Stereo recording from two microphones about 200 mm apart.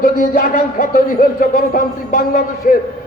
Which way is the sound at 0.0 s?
45° left (ahead or behind).